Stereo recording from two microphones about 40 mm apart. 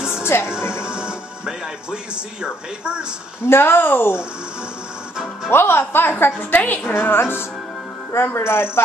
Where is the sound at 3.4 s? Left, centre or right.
Left.